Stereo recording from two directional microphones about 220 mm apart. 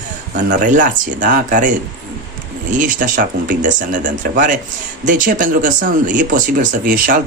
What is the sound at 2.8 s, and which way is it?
Speech, 35° right (ahead or behind).